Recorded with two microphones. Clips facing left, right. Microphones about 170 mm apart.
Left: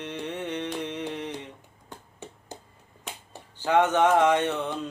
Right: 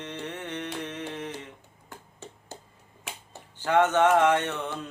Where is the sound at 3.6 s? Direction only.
10° left (ahead or behind).